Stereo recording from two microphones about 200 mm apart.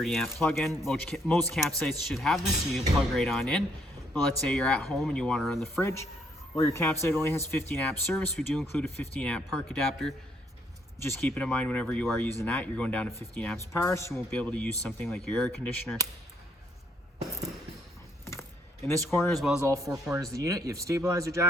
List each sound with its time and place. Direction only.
0.0 s speech: centre (ahead or behind)
6.6 s speech: 15° left (ahead or behind)
18.9 s speech: 10° left (ahead or behind)
19.6 s speech: 15° right (ahead or behind)